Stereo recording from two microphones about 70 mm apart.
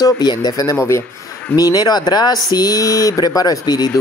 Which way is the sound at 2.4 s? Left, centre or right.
Left.